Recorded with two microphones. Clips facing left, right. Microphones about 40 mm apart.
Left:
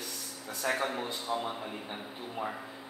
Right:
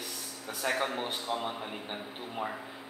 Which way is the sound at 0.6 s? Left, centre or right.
Right.